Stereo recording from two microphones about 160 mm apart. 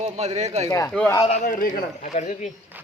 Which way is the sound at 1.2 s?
45° left (ahead or behind).